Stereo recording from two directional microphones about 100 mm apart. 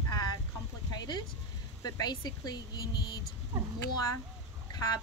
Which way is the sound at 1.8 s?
40° left (ahead or behind).